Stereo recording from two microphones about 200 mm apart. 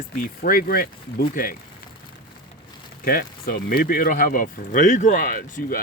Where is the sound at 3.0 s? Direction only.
50° left (ahead or behind).